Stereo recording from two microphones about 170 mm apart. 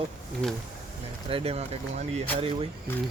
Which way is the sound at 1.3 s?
35° right (ahead or behind).